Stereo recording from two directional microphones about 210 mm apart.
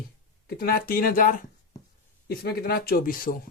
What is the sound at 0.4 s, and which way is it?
Speech, 45° left (ahead or behind).